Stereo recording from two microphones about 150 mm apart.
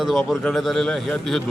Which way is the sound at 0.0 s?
Centre (ahead or behind).